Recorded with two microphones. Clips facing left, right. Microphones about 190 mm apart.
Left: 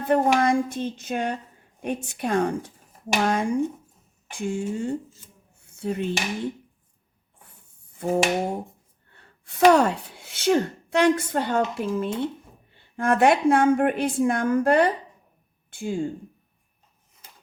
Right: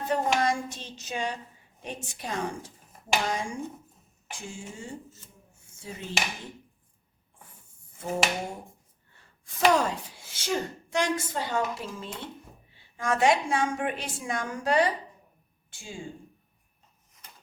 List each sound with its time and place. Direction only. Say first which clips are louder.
0.0 s a woman's voice: left 6 dB; 55° left (ahead or behind)
7.9 s a woman's voice: left 7 dB; 65° left (ahead or behind)
9.1 s a sound: left 11 dB; 65° left (ahead or behind)
9.7 s a woman's voice: left 6 dB; 60° left (ahead or behind)